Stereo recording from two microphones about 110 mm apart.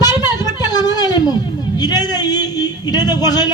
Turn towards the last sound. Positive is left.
turn(degrees=40)  # may be behind; listen again after turning